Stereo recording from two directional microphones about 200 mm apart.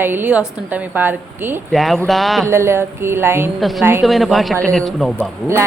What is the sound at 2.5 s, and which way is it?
A woman's voice, 10° right (ahead or behind).